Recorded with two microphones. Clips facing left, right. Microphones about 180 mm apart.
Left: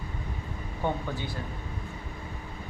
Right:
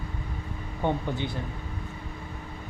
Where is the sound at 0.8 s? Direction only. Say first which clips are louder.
Right 3 dB; 15° right (ahead or behind).